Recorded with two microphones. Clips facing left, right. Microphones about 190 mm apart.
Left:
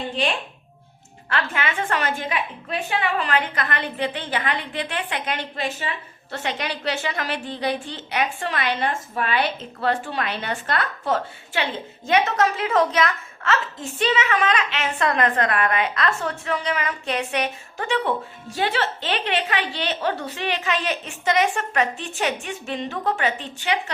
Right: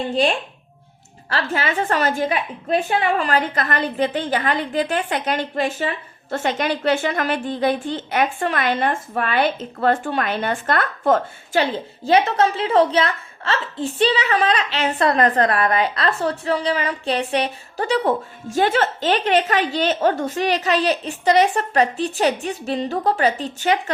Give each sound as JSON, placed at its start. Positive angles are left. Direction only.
{"t": 1.3, "sound": "a woman's voice", "side_deg": -35}